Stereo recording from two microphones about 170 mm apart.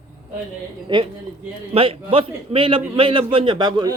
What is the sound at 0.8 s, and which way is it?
A man's voice, 30° right (ahead or behind).